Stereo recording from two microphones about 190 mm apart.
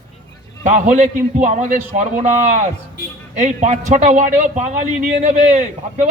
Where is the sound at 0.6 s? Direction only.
40° right (ahead or behind).